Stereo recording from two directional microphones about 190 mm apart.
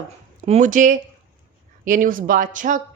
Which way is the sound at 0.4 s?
40° right (ahead or behind).